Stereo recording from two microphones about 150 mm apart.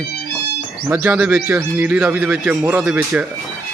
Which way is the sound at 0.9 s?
15° right (ahead or behind).